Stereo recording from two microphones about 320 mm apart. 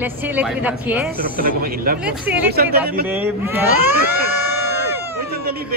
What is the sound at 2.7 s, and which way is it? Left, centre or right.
Speech, right.